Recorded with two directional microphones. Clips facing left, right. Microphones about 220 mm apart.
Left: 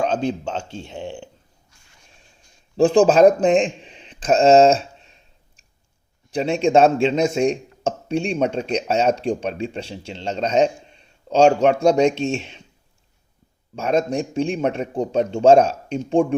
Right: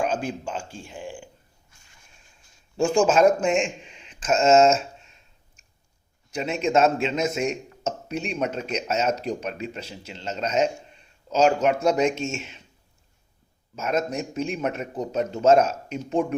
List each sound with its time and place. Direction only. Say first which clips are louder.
0.0 s speech: left 5 dB; 5° right (ahead or behind)
0.7 s speech: left 5 dB; 25° left (ahead or behind)
2.7 s a man's voice: left 6 dB; 35° left (ahead or behind)
13.7 s a man's voice: left 5 dB; 30° left (ahead or behind)